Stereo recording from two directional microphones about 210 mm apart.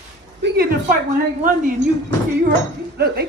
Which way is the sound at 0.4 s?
45° right (ahead or behind).